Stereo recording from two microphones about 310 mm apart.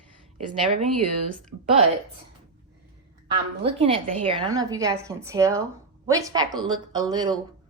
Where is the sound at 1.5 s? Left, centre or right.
Right.